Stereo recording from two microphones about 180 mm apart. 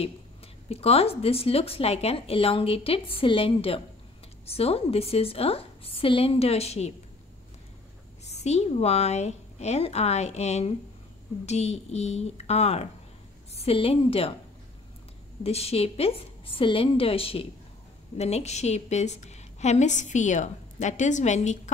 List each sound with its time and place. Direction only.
0.7 s a woman's voice: 35° left (ahead or behind)
8.4 s a woman's voice: 40° left (ahead or behind)
15.4 s a woman's voice: 35° left (ahead or behind)